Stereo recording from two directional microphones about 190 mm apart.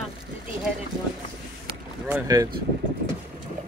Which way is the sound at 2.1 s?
20° right (ahead or behind).